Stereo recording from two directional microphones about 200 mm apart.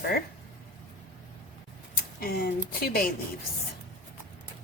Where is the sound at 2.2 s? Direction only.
50° left (ahead or behind).